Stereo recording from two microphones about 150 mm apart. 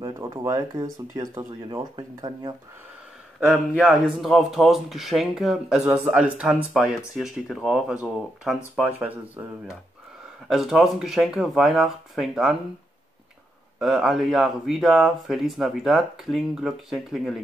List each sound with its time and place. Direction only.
0.4 s speech: 20° right (ahead or behind)
3.3 s speech: centre (ahead or behind)
13.7 s speech: centre (ahead or behind)